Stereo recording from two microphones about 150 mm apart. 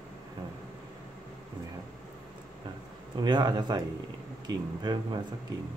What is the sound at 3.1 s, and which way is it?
Speech, 30° right (ahead or behind).